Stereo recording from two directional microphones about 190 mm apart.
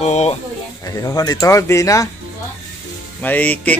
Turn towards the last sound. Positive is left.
turn(degrees=10)  # may be behind; listen again after turning